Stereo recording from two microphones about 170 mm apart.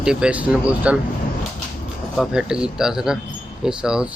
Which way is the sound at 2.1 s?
5° right (ahead or behind).